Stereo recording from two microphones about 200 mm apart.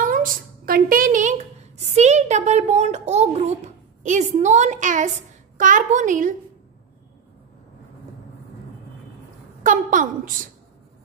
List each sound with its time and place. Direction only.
0.0 s a sound: 45° right (ahead or behind)
2.0 s a child's voice: 35° right (ahead or behind)
9.6 s a woman's voice: 40° right (ahead or behind)